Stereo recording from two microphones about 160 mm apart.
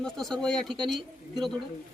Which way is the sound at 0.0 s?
Centre (ahead or behind).